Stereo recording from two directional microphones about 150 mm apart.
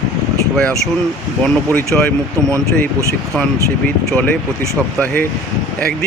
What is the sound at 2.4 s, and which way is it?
Speech, 20° right (ahead or behind).